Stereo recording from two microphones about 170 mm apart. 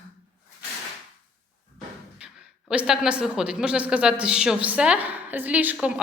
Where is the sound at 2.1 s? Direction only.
5° right (ahead or behind).